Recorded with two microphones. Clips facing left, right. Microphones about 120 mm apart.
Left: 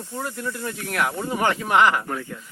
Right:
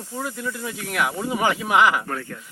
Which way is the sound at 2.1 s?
10° left (ahead or behind).